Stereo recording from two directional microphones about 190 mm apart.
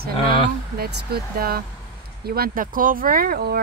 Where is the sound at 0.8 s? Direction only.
50° right (ahead or behind).